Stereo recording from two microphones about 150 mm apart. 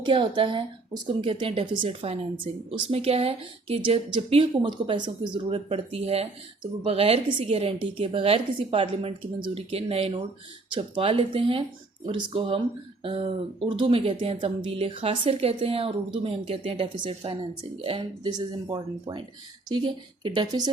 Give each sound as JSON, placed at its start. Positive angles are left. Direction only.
{"t": 0.0, "sound": "a woman's voice", "side_deg": -35}